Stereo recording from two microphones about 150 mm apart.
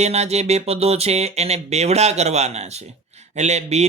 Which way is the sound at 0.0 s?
45° right (ahead or behind).